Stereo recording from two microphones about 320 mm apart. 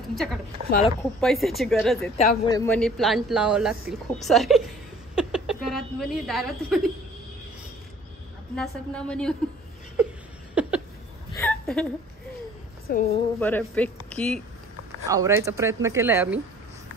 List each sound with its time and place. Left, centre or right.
0.1 s speech: centre
0.7 s speech: left
1.2 s speech: centre
5.1 s a sound: centre
8.5 s speech: centre
10.5 s a sound: centre
11.3 s hiccup: centre
12.8 s a woman's voice: left
13.4 s speech: centre
15.0 s speech: centre